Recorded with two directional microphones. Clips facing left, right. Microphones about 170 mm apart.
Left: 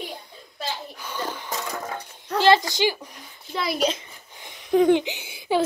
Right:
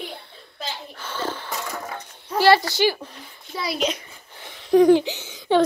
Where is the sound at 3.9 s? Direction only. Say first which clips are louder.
Right 1 dB; 20° left (ahead or behind).